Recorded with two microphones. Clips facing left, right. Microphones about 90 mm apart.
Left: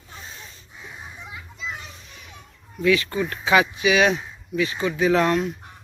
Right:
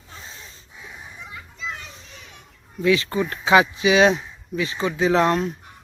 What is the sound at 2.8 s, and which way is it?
Speech, 25° right (ahead or behind).